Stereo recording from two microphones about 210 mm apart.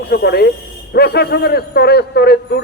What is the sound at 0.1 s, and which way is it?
A man's voice, 50° left (ahead or behind).